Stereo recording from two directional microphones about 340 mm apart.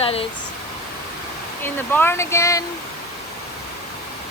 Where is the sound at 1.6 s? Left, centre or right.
Centre.